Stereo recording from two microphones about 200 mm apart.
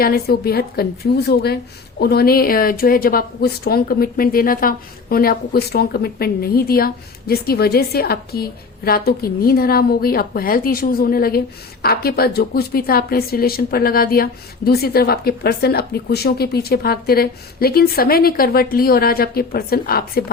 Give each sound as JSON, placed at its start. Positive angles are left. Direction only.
{"t": 0.0, "sound": "speech", "side_deg": 50}